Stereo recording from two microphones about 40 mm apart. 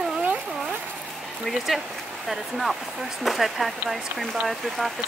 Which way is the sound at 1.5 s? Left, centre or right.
Centre.